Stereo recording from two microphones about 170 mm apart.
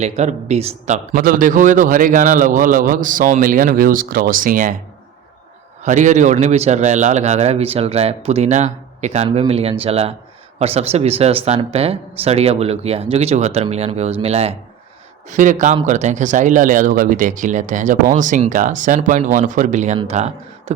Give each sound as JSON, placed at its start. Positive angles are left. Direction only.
{"t": 0.0, "sound": "a man's voice", "side_deg": -40}
{"t": 5.8, "sound": "a man's voice", "side_deg": -45}
{"t": 15.3, "sound": "a man's voice", "side_deg": -50}